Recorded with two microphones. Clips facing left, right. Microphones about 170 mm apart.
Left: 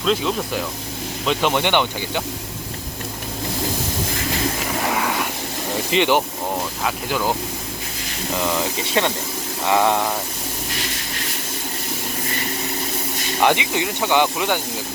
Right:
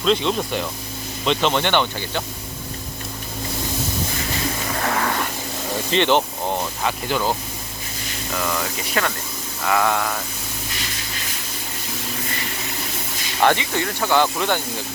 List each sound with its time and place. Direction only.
0.0 s speech: 5° left (ahead or behind)
4.8 s a sound: 10° left (ahead or behind)
5.9 s speech: 10° left (ahead or behind)
6.8 s speech: centre (ahead or behind)
8.4 s speech: 25° left (ahead or behind)
13.4 s speech: 15° left (ahead or behind)